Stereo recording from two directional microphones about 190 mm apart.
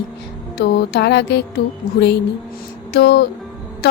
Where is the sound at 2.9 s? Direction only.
60° left (ahead or behind).